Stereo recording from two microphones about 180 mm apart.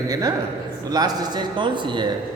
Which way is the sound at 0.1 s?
20° right (ahead or behind).